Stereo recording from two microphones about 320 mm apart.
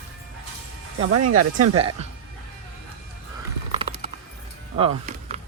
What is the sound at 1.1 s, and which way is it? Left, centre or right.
Speech, right.